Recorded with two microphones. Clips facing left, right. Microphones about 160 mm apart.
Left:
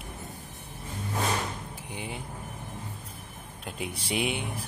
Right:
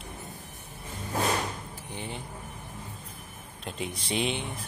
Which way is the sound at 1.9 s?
10° left (ahead or behind).